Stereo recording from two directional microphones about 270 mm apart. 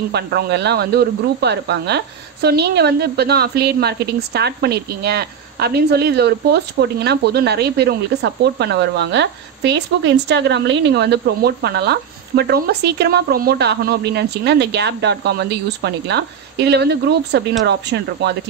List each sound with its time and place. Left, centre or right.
0.1 s speech: right